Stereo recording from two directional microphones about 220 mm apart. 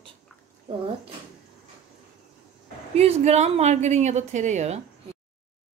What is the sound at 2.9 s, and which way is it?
A woman's voice, 30° right (ahead or behind).